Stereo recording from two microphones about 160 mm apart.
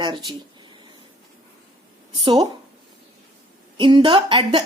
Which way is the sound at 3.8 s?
30° right (ahead or behind).